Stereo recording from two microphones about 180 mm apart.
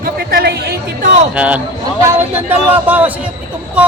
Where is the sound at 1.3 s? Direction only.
5° right (ahead or behind).